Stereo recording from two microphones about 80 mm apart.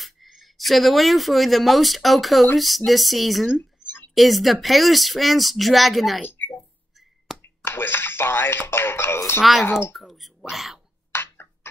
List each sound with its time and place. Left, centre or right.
0.0 s speech: centre
7.3 s finger snapping: centre
7.6 s speech: left
9.4 s speech: centre
11.1 s a sound: left